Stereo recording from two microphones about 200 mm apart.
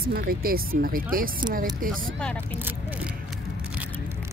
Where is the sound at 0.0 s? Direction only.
50° right (ahead or behind).